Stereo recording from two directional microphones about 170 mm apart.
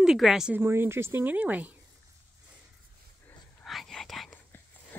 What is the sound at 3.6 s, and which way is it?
Whispering, centre (ahead or behind).